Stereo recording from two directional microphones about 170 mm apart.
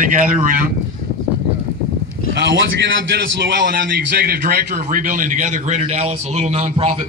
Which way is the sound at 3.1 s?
85° right.